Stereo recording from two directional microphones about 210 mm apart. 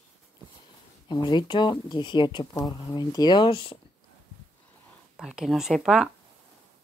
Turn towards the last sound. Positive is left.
turn(degrees=0)  # may be behind; listen again after turning